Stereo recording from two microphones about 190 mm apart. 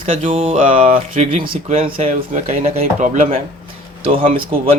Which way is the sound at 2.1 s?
45° right (ahead or behind).